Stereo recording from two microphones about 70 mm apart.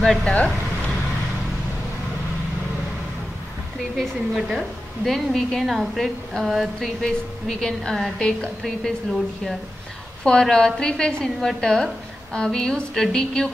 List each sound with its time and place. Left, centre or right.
0.0 s a woman's voice: centre
0.3 s a sound: centre
4.4 s a woman's voice: centre